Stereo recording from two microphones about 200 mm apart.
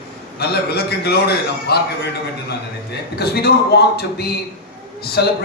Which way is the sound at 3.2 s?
50° left (ahead or behind).